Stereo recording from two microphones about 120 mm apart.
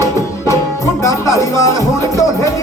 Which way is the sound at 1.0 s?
25° left (ahead or behind).